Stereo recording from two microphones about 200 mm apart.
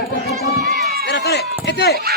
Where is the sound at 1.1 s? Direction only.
55° left (ahead or behind).